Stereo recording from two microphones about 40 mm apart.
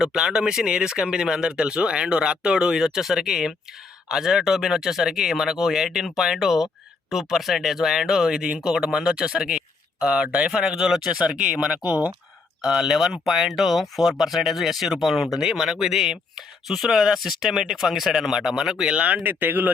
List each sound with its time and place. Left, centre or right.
0.0 s speech: centre
11.9 s speech: right
12.6 s speech: centre
18.9 s speech: right
19.2 s speech: right